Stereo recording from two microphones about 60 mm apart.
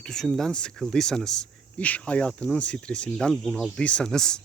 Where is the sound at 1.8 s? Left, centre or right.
Left; by 3.7 s centre.